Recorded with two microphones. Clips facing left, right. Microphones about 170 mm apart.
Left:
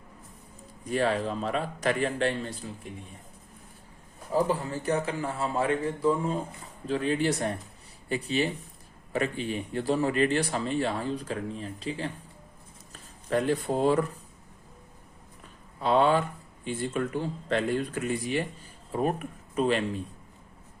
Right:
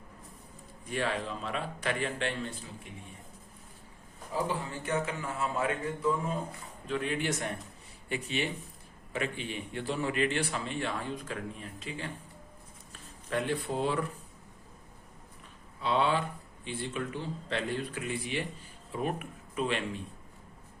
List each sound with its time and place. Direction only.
0.9 s speech: 40° left (ahead or behind)
4.3 s speech: 40° left (ahead or behind)
15.8 s a man's voice: 45° left (ahead or behind)